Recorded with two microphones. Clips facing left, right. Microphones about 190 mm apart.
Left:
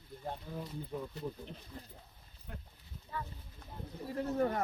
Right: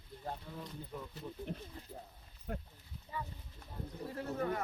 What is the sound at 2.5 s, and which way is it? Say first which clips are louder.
Speech: right 8 dB; 45° right (ahead or behind).